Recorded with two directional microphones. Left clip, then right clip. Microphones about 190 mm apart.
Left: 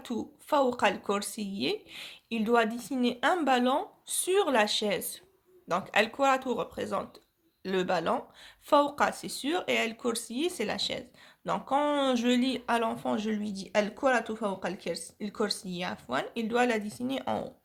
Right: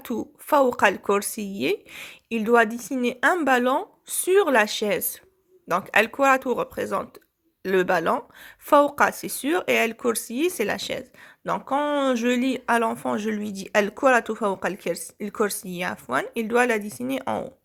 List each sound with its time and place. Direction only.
0.0 s speech: 35° right (ahead or behind)